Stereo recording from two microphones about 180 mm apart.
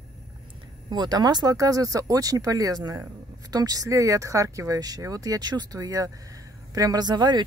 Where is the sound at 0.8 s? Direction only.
25° right (ahead or behind).